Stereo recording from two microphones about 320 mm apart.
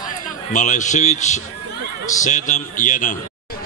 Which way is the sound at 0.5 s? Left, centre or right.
Left.